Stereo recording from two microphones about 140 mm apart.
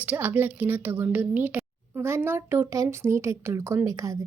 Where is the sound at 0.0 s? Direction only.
10° right (ahead or behind).